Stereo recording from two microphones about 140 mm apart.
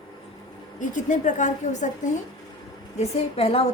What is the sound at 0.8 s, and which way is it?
A woman's voice, 65° left (ahead or behind).